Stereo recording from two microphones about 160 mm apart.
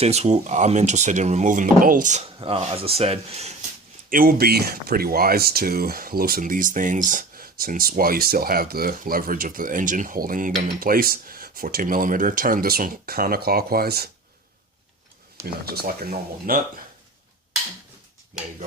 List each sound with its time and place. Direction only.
0.0 s speech: 40° right (ahead or behind)
2.4 s speech: 35° right (ahead or behind)
4.1 s speech: 65° right (ahead or behind)
15.4 s speech: 75° right (ahead or behind)